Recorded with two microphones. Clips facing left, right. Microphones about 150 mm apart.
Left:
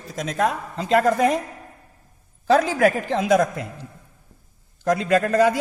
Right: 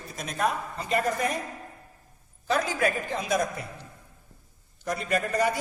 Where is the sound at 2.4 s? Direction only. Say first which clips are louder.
Left 9 dB; 90° left.